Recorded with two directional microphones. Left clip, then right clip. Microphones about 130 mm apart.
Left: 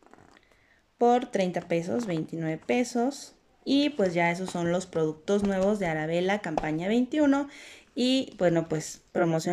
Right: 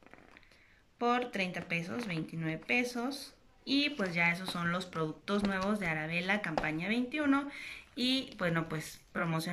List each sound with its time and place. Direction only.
0.9 s speech: 55° left (ahead or behind)